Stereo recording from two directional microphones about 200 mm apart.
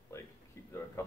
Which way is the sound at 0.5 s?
15° left (ahead or behind).